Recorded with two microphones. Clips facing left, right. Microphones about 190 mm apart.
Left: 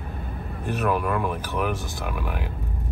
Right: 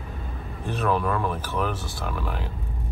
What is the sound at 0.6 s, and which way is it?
Speech, 10° left (ahead or behind).